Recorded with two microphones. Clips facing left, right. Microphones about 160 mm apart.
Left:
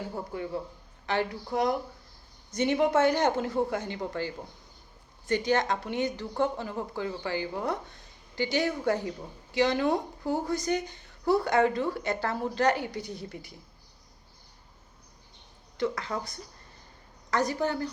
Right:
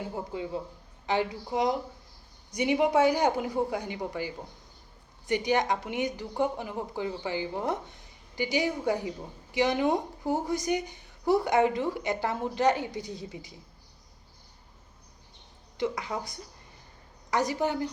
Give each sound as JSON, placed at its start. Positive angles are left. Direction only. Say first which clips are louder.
{"t": 0.0, "sound": "a woman's voice", "louder": "even", "side_deg": -20}
{"t": 15.8, "sound": "a woman's voice", "louder": "even", "side_deg": -15}